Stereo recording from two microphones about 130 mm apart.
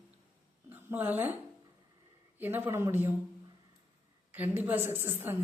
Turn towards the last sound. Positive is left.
turn(degrees=-15)  # may be behind; listen again after turning